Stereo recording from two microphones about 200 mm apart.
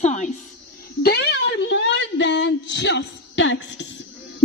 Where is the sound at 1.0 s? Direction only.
55° left (ahead or behind).